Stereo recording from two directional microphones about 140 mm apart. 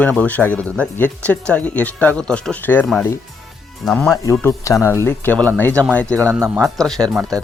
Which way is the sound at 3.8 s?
5° left (ahead or behind).